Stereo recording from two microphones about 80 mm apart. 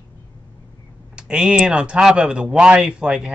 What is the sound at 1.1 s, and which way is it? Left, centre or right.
Speech, centre.